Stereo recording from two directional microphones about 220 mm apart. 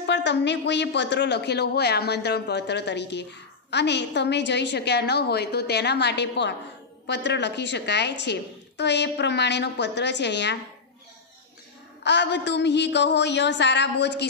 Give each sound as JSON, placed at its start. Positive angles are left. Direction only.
{"t": 0.0, "sound": "a woman's voice", "side_deg": 55}
{"t": 12.0, "sound": "a woman's voice", "side_deg": 50}